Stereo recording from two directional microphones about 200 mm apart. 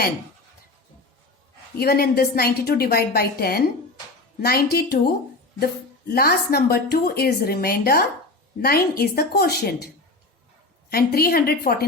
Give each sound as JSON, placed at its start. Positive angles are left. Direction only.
{"t": 1.8, "sound": "speech", "side_deg": 50}
{"t": 10.9, "sound": "speech", "side_deg": 50}